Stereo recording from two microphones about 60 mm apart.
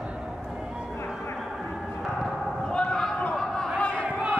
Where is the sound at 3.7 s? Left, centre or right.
Left.